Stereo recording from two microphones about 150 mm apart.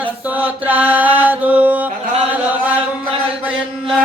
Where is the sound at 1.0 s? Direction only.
10° right (ahead or behind).